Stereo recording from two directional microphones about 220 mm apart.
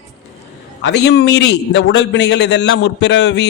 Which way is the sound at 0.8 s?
55° left (ahead or behind).